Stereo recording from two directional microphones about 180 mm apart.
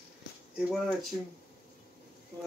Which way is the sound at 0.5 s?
Centre (ahead or behind).